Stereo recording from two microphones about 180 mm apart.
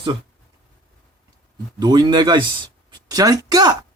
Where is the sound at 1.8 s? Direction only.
25° right (ahead or behind).